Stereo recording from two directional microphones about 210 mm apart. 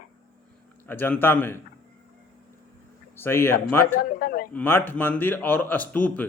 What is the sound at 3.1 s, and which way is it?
Speech, 10° left (ahead or behind).